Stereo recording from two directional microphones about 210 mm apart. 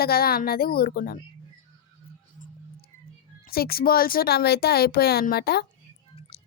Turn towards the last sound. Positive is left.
turn(degrees=50)  # may be behind; listen again after turning